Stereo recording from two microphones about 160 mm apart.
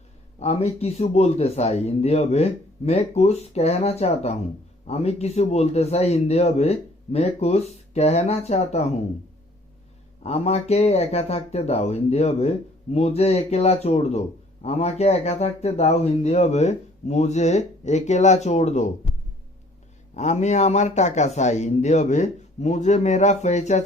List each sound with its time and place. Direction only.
0.3 s speech: 40° left (ahead or behind)
10.2 s speech: 40° left (ahead or behind)
20.1 s a man's voice: 45° left (ahead or behind)